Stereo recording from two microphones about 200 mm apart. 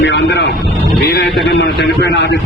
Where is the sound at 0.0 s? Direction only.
60° left (ahead or behind).